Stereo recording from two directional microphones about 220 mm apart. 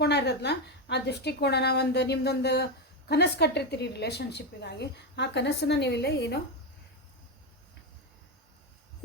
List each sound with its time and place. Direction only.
0.0 s a woman's voice: 50° left (ahead or behind)